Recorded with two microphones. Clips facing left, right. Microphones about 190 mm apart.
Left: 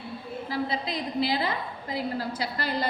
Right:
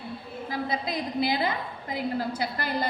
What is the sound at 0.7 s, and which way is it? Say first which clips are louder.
A woman's voice: right 1 dB; 50° right (ahead or behind).